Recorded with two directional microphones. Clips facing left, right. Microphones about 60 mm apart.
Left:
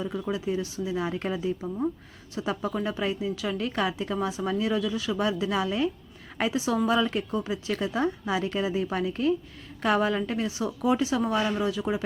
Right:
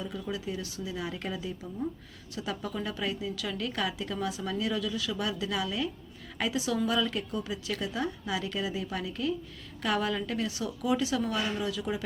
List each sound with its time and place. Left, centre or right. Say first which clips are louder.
0.0 s a woman's voice: left 6 dB; left